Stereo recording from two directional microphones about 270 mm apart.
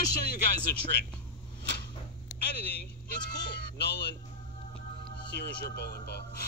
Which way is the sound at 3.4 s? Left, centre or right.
Left.